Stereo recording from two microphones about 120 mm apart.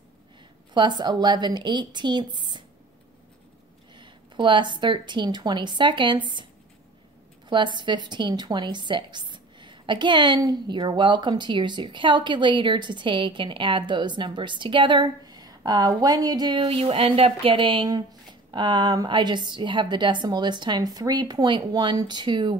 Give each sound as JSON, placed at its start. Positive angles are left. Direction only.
{"t": 0.7, "sound": "a woman's voice", "side_deg": -40}
{"t": 3.9, "sound": "speech", "side_deg": -40}
{"t": 7.4, "sound": "a woman's voice", "side_deg": -40}